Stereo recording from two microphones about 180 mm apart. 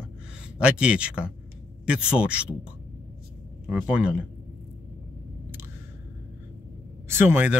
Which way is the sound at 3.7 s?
5° right (ahead or behind).